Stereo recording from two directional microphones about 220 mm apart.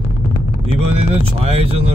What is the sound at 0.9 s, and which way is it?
Speech, 25° right (ahead or behind).